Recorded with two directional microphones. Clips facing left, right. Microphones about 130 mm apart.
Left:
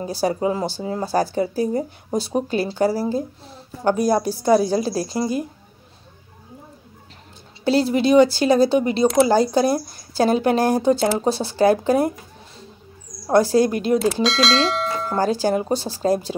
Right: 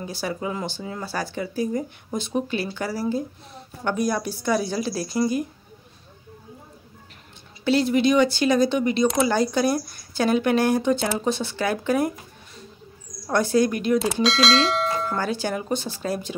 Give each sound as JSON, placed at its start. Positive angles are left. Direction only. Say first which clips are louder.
{"t": 0.0, "sound": "speech", "louder": "left 7 dB", "side_deg": 35}
{"t": 7.6, "sound": "speech", "louder": "left 2 dB", "side_deg": 35}
{"t": 13.3, "sound": "speech", "louder": "left 4 dB", "side_deg": 35}
{"t": 14.0, "sound": "speech", "louder": "left 2 dB", "side_deg": 0}
{"t": 15.1, "sound": "speech", "louder": "left 6 dB", "side_deg": 35}